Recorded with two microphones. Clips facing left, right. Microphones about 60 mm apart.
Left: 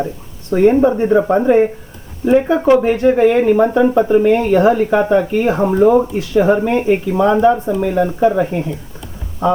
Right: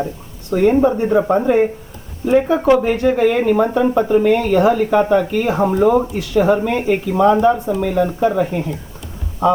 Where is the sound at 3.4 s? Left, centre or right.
Centre.